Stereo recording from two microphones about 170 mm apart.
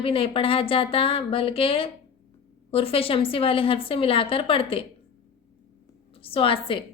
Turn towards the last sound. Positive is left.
turn(degrees=30)  # may be behind; listen again after turning